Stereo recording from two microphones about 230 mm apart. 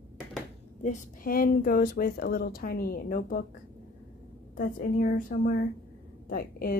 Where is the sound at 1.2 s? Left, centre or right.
Left.